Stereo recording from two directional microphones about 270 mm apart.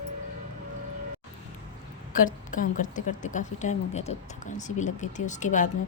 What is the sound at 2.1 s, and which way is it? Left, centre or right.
A woman's voice, left.